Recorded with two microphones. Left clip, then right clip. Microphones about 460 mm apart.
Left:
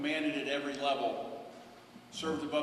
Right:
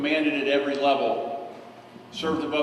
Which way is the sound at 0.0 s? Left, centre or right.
Left.